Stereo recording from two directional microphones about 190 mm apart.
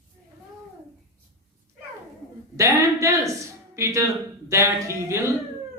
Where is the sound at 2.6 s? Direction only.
15° right (ahead or behind).